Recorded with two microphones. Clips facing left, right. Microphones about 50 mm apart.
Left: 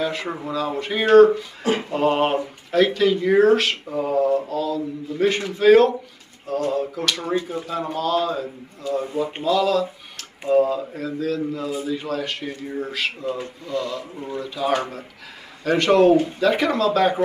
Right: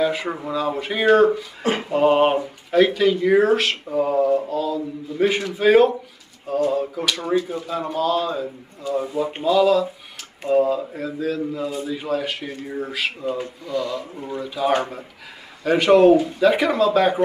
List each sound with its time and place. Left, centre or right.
0.0 s speech: centre
1.6 s speech: right
1.9 s speech: centre
13.8 s speech: centre
14.3 s speech: centre